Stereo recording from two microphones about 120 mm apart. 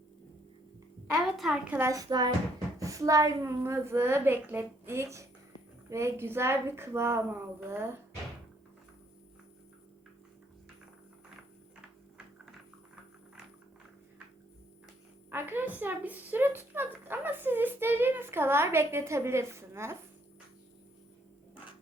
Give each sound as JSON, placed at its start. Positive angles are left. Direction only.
{"t": 1.4, "sound": "a woman's voice", "side_deg": -5}
{"t": 1.8, "sound": "a woman's voice", "side_deg": -30}
{"t": 15.3, "sound": "a woman's voice", "side_deg": -15}